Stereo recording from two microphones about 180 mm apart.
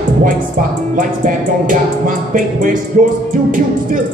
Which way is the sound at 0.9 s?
50° right (ahead or behind).